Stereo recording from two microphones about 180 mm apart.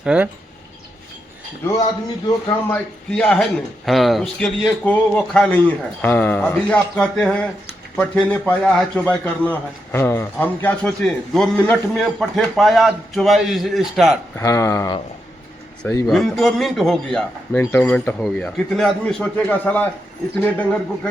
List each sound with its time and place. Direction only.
0.0 s a man's voice: 5° right (ahead or behind)
2.5 s a man's voice: 10° left (ahead or behind)
14.3 s speech: 15° left (ahead or behind)
16.0 s a man's voice: centre (ahead or behind)